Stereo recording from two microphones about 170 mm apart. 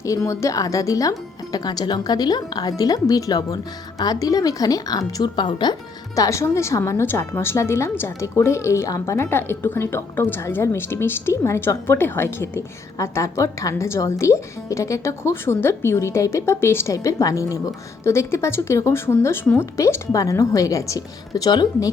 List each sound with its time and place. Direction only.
0.0 s a woman's voice: 20° left (ahead or behind)